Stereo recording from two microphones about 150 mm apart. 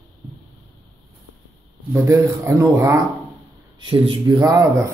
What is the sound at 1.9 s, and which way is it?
A woman's voice, 20° right (ahead or behind).